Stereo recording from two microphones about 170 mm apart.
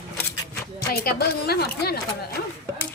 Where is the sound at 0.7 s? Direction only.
65° left (ahead or behind).